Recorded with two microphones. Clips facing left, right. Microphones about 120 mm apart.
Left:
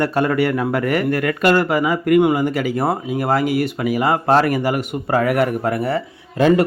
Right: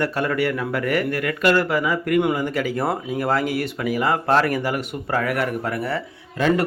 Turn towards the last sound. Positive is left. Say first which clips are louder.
# left 6 dB
turn(degrees=20)  # may be behind; listen again after turning